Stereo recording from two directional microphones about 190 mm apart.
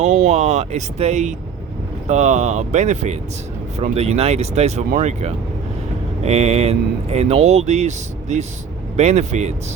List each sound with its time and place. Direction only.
0.0 s speech: 35° right (ahead or behind)